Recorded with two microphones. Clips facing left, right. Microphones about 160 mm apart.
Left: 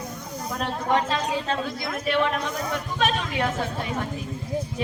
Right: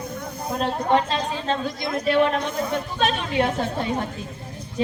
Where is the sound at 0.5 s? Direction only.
30° right (ahead or behind).